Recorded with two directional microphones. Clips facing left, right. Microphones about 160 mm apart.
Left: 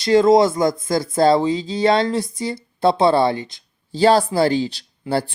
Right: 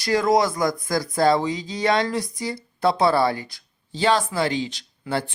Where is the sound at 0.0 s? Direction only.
25° left (ahead or behind).